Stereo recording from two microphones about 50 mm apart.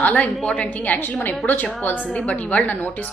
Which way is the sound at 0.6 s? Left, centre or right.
Left.